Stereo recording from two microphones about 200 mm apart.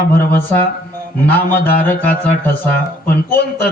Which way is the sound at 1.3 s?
10° left (ahead or behind).